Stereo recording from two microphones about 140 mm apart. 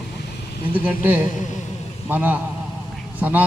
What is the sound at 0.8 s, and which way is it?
A man's voice, 10° right (ahead or behind).